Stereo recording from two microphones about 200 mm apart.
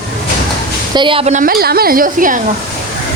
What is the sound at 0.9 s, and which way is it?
A woman's voice, 25° right (ahead or behind).